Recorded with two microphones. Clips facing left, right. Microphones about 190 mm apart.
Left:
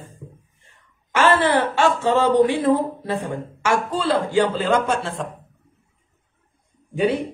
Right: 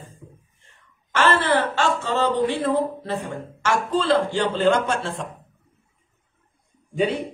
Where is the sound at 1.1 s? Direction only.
10° left (ahead or behind).